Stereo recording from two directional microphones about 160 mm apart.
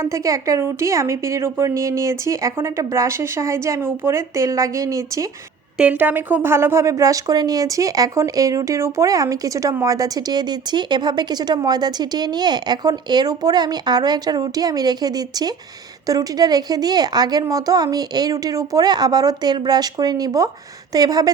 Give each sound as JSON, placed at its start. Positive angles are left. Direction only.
{"t": 0.0, "sound": "speech", "side_deg": -20}
{"t": 5.7, "sound": "speech", "side_deg": -10}